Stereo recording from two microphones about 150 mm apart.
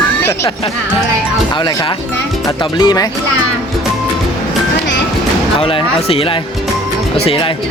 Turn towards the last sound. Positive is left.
turn(degrees=40)  # may be behind; listen again after turning